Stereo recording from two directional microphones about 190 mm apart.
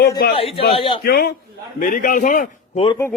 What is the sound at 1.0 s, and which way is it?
A man's voice, 55° left (ahead or behind).